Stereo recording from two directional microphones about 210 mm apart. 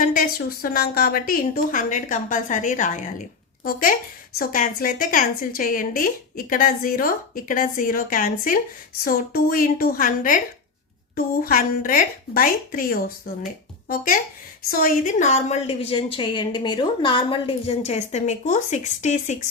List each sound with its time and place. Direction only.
0.0 s a woman's voice: 40° left (ahead or behind)